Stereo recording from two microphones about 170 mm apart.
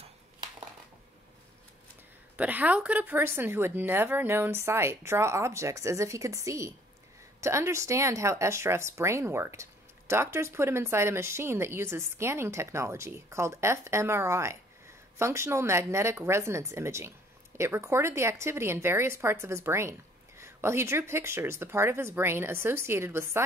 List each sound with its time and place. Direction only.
2.3 s speech: 10° right (ahead or behind)